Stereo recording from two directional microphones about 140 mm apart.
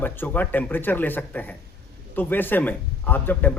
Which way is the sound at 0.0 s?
15° left (ahead or behind).